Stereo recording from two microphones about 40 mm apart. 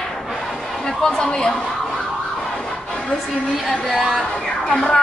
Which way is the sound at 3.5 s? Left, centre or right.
Centre.